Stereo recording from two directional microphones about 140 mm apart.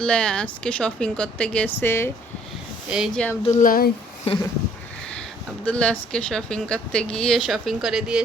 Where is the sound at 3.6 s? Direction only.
90° left.